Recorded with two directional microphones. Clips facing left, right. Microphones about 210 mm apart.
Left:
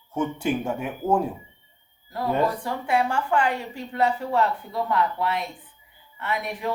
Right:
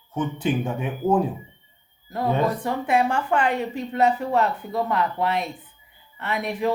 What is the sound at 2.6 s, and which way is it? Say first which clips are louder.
A woman's voice: right 2 dB; 20° right (ahead or behind).